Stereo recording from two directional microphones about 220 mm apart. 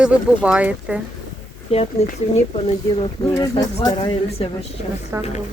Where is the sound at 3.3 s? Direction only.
15° left (ahead or behind).